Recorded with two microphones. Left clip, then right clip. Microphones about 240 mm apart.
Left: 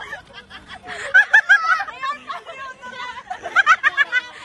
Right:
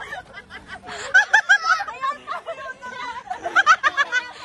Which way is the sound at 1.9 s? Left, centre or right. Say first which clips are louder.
Even; right.